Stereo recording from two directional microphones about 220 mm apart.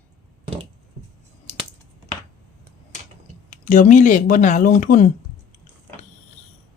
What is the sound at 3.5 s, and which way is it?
Speech, 35° left (ahead or behind).